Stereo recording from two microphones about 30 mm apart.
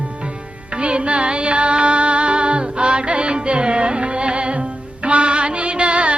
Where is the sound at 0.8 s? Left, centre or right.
Right.